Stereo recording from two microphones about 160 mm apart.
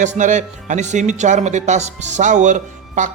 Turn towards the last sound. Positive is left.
turn(degrees=-50)  # may be behind; listen again after turning